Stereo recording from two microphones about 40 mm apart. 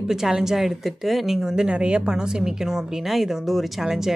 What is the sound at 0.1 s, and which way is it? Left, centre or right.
Speech, centre.